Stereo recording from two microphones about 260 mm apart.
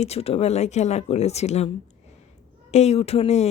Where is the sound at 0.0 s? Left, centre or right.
Left.